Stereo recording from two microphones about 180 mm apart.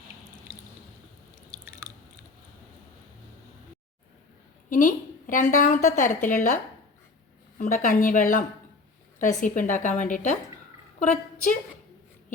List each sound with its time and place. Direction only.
1.5 s biting: 15° right (ahead or behind)
4.7 s a woman's voice: 50° left (ahead or behind)
7.6 s a woman's voice: 50° left (ahead or behind)